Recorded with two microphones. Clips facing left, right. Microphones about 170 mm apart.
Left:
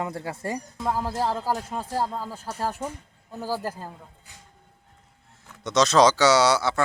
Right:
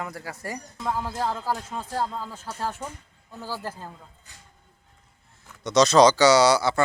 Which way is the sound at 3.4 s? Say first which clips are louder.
Left 5 dB; 40° left (ahead or behind).